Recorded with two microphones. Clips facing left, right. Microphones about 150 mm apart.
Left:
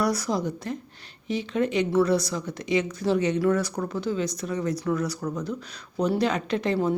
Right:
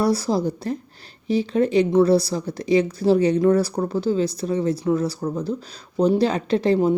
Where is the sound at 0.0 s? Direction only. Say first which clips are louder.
Right 5 dB; 30° right (ahead or behind).